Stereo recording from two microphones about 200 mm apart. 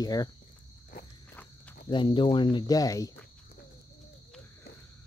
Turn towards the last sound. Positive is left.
turn(degrees=15)  # may be behind; listen again after turning